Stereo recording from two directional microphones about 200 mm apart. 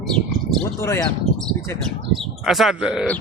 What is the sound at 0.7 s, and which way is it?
Speech, 15° left (ahead or behind).